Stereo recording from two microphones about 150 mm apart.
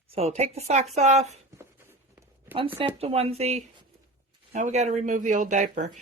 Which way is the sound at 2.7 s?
40° right (ahead or behind).